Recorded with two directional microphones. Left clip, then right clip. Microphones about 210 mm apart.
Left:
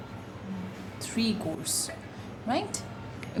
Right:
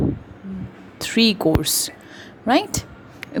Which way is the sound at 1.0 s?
40° right (ahead or behind).